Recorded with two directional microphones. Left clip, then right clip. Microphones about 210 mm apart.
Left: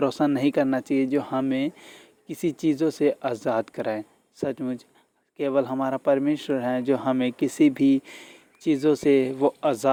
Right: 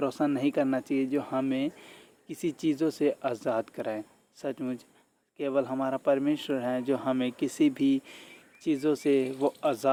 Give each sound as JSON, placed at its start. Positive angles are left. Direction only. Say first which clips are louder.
{"t": 0.0, "sound": "speech", "louder": "left 5 dB", "side_deg": 30}